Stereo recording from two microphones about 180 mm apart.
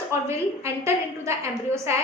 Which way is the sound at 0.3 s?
15° right (ahead or behind).